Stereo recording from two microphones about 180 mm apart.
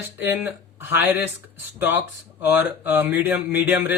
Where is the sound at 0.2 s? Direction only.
10° right (ahead or behind).